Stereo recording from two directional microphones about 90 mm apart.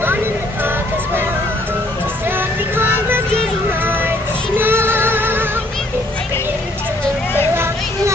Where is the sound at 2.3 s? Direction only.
25° right (ahead or behind).